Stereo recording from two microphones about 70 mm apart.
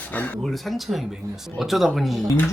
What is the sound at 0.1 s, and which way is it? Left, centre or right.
Speech, left.